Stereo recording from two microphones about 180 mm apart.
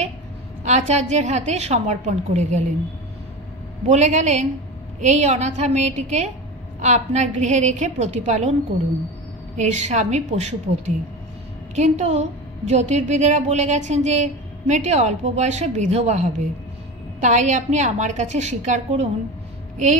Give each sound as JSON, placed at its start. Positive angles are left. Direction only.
{"t": 0.7, "sound": "a woman's voice", "side_deg": -40}
{"t": 3.9, "sound": "a woman's voice", "side_deg": -40}
{"t": 9.6, "sound": "a woman's voice", "side_deg": -40}
{"t": 11.7, "sound": "a woman's voice", "side_deg": -35}